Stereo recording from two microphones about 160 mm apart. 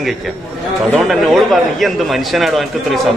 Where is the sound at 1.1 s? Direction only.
Centre (ahead or behind).